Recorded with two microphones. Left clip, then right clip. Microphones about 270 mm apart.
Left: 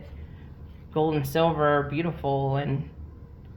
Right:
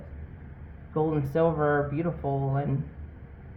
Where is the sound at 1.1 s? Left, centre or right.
Centre.